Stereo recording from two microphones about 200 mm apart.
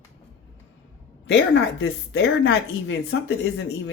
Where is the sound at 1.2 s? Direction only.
70° left (ahead or behind).